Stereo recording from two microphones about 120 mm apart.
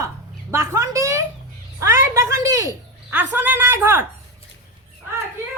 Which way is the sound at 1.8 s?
25° right (ahead or behind).